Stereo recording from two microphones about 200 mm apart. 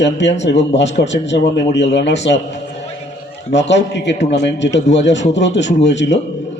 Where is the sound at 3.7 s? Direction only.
60° left (ahead or behind).